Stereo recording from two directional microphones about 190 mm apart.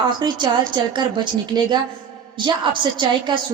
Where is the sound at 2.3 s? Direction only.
25° right (ahead or behind).